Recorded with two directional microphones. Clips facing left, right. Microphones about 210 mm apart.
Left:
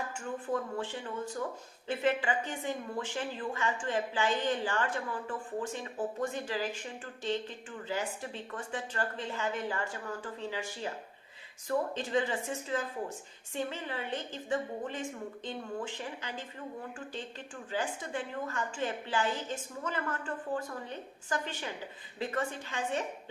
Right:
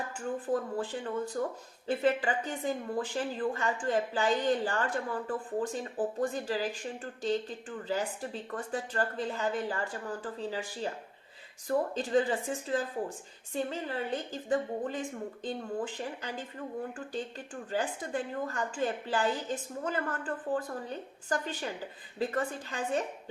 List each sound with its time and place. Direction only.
0.2 s a woman's voice: 35° right (ahead or behind)
11.9 s a woman's voice: 35° right (ahead or behind)